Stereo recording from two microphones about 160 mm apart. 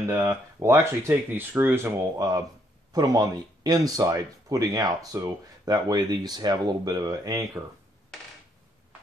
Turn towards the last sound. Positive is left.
turn(degrees=-20)  # may be behind; listen again after turning